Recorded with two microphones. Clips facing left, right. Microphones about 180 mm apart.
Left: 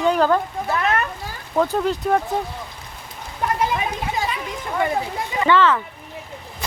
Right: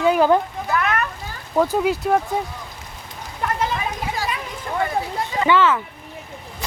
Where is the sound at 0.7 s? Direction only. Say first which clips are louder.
Even; 30° left (ahead or behind).